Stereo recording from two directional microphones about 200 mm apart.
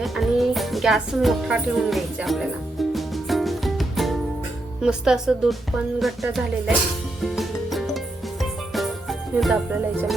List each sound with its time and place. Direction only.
0.0 s music: centre (ahead or behind)
4.8 s speech: 5° right (ahead or behind)
7.3 s music: centre (ahead or behind)